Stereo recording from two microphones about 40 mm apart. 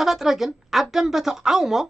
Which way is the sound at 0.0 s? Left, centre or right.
Centre.